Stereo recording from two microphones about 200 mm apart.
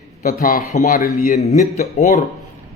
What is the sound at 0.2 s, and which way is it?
A man's voice, 45° left (ahead or behind).